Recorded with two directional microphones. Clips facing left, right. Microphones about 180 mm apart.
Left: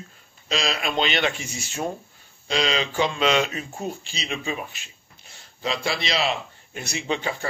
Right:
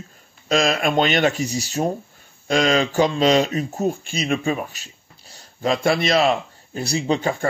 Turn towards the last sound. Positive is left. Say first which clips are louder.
# right 6 dB
turn(degrees=-40)  # may be behind; listen again after turning